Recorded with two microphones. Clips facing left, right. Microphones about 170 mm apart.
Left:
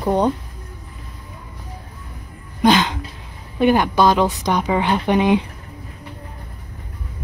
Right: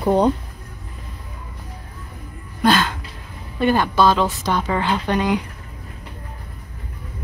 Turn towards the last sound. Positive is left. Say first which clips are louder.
# left 4 dB
turn(degrees=20)  # may be behind; listen again after turning